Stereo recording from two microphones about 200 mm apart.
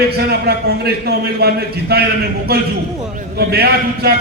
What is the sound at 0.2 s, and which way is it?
A man's voice, 55° right (ahead or behind).